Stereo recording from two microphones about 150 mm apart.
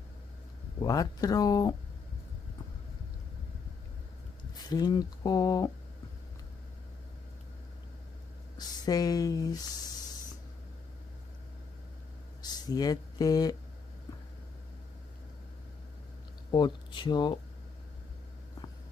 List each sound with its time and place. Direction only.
0.8 s speech: 25° left (ahead or behind)
4.6 s speech: 25° left (ahead or behind)
8.5 s speech: 25° left (ahead or behind)
12.4 s speech: 25° left (ahead or behind)
16.4 s speech: 30° left (ahead or behind)